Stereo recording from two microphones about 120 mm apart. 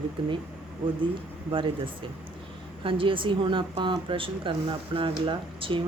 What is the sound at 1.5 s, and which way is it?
Speech, 45° right (ahead or behind).